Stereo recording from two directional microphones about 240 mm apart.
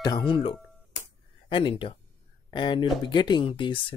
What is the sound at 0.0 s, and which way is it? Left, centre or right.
Speech, centre.